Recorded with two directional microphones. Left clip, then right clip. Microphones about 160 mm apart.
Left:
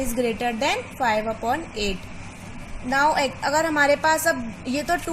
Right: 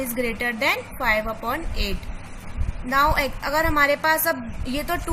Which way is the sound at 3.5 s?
25° left (ahead or behind).